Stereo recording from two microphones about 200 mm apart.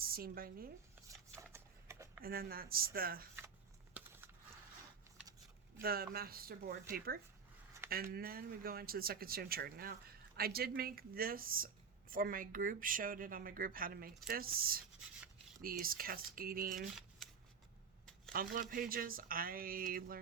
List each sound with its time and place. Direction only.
0.0 s a woman's voice: 45° right (ahead or behind)
1.5 s shuffling cards: 15° right (ahead or behind)
2.2 s speech: 50° right (ahead or behind)
4.0 s biting: 5° right (ahead or behind)
5.8 s speech: 50° right (ahead or behind)
15.8 s speech: 45° right (ahead or behind)
18.3 s speech: 45° right (ahead or behind)